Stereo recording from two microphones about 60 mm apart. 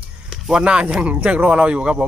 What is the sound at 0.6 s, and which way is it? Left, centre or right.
Speech, centre.